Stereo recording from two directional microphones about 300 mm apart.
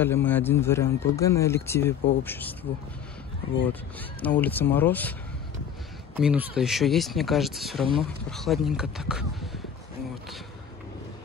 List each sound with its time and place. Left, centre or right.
0.0 s speech: centre
4.2 s speech: centre
6.1 s speech: centre
7.8 s speech: centre
8.3 s speech: centre